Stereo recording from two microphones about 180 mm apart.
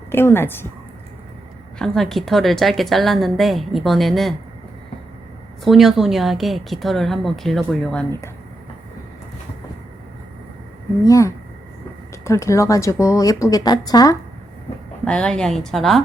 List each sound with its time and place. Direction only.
0.1 s a woman's voice: 10° left (ahead or behind)
1.8 s a woman's voice: centre (ahead or behind)
5.6 s a woman's voice: centre (ahead or behind)
11.0 s a woman's voice: 15° left (ahead or behind)
15.0 s a woman's voice: 5° left (ahead or behind)